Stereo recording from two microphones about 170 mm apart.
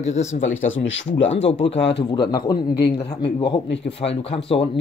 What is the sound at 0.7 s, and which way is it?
Speech, 90° left.